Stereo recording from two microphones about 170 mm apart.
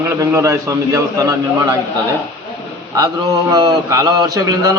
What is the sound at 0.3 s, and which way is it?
Speech, 20° right (ahead or behind).